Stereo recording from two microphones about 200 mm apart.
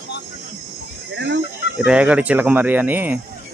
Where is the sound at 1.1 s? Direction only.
60° right (ahead or behind).